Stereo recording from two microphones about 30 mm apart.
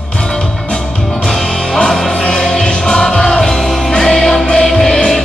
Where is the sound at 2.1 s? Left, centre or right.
Left.